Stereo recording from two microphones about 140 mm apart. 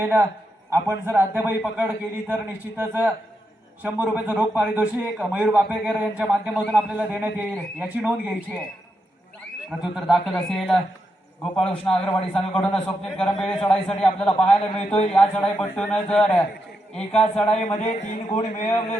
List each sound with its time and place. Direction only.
0.0 s a man's voice: 15° right (ahead or behind)
9.8 s a man's voice: centre (ahead or behind)
17.7 s a man's voice: 55° left (ahead or behind)